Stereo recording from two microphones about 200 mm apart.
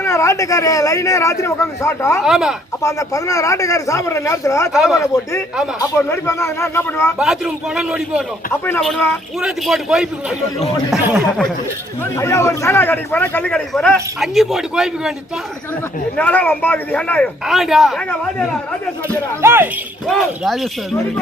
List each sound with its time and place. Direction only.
0.0 s a man's voice: 15° left (ahead or behind)
2.2 s a man's voice: 5° right (ahead or behind)
2.8 s a man's voice: 15° left (ahead or behind)
4.7 s a man's voice: centre (ahead or behind)
4.9 s a man's voice: 15° left (ahead or behind)
7.2 s a man's voice: 5° right (ahead or behind)
12.1 s a man's voice: 15° left (ahead or behind)
16.1 s a man's voice: 5° left (ahead or behind)
19.0 s speech: 15° right (ahead or behind)
20.1 s a man's voice: centre (ahead or behind)